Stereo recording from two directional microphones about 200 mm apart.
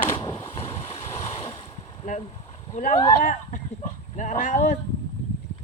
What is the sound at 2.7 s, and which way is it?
Speech, 35° left (ahead or behind).